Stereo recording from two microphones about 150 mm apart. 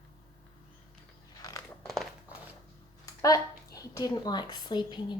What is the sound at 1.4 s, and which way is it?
Crunch, 25° left (ahead or behind).